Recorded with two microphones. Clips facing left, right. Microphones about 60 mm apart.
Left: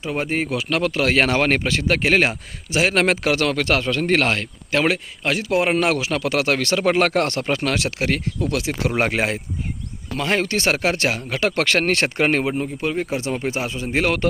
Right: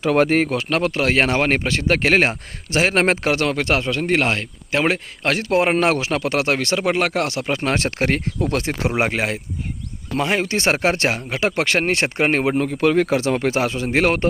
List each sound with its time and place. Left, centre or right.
0.0 s speech: right
0.7 s speech: right
1.6 s speech: right
5.2 s speech: right
5.5 s speech: right
6.9 s speech: centre
7.5 s speech: right
7.9 s speech: right
8.9 s speech: centre
9.1 s speech: centre
10.5 s speech: right
12.5 s speech: right
13.6 s speech: right
13.8 s speech: right